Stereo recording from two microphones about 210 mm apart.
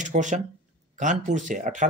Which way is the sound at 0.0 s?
35° right (ahead or behind).